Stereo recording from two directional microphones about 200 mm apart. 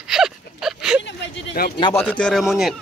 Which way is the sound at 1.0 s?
65° left (ahead or behind).